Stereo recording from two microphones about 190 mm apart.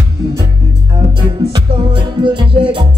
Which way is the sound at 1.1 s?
25° right (ahead or behind).